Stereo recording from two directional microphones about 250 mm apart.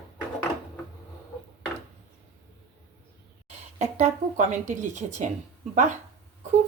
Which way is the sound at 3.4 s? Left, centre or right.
Right.